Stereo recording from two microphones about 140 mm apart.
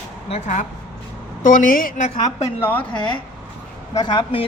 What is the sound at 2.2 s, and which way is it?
Speech, 15° left (ahead or behind).